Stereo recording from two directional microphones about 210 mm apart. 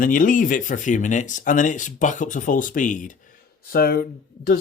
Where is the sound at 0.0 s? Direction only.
40° left (ahead or behind).